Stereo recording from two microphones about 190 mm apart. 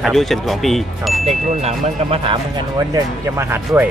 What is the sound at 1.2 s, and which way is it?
Speech, 35° right (ahead or behind).